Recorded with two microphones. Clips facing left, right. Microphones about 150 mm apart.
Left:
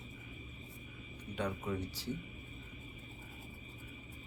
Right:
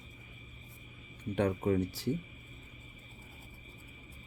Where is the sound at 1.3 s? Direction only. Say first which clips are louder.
Right 8 dB; 60° right (ahead or behind).